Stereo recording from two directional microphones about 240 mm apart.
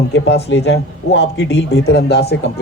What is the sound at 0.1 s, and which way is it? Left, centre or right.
A man's voice, left.